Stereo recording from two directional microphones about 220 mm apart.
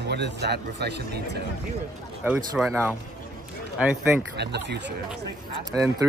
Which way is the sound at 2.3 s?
5° right (ahead or behind).